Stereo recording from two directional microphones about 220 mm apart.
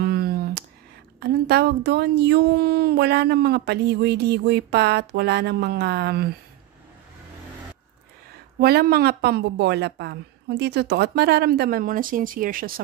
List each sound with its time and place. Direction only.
0.0 s a sound: 45° right (ahead or behind)
1.2 s a woman's voice: 45° right (ahead or behind)
8.5 s a woman's voice: 45° right (ahead or behind)